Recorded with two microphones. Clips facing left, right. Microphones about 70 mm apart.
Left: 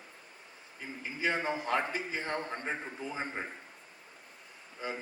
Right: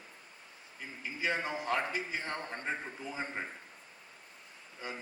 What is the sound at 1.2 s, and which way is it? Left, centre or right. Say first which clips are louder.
A man's voice: left 2 dB; left.